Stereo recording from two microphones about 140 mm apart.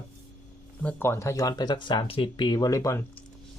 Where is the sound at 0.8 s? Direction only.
10° left (ahead or behind).